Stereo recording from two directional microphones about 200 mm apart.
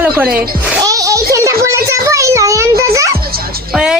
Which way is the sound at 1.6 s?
15° right (ahead or behind).